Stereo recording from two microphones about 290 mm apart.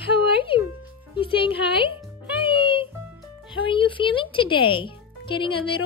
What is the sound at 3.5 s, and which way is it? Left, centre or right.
A woman's voice, centre.